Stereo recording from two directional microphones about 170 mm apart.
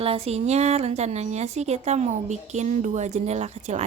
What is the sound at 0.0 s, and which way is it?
A woman's voice, 35° right (ahead or behind).